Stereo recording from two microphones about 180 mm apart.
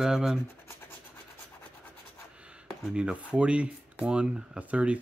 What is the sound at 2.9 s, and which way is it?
Speech, 5° right (ahead or behind).